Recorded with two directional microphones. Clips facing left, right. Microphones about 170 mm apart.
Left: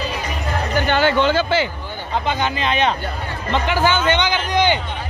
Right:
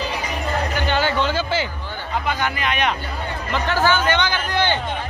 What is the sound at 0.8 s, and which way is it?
Music, 60° left (ahead or behind).